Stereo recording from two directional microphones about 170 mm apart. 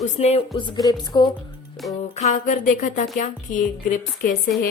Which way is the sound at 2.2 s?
45° left (ahead or behind).